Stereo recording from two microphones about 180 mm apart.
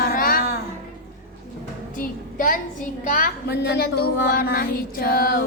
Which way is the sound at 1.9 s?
45° left (ahead or behind).